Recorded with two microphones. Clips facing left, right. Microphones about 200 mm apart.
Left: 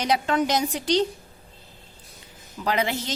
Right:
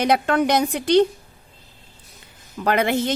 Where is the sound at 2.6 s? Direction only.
55° right (ahead or behind).